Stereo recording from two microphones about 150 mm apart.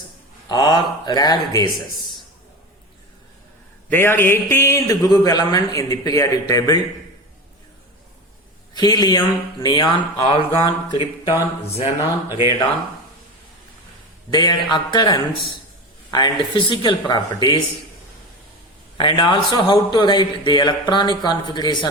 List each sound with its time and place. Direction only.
0.4 s a man's voice: 30° left (ahead or behind)
3.8 s a man's voice: 15° left (ahead or behind)
8.7 s a man's voice: 30° left (ahead or behind)
14.3 s a man's voice: 30° left (ahead or behind)
18.9 s a man's voice: 30° left (ahead or behind)